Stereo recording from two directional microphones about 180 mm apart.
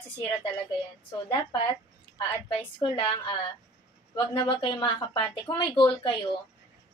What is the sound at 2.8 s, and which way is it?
A woman's voice, 30° left (ahead or behind).